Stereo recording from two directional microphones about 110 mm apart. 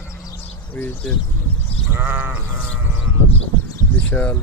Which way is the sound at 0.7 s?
20° left (ahead or behind).